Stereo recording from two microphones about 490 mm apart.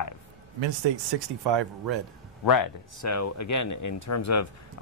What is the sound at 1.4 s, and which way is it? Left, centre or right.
Speech, right.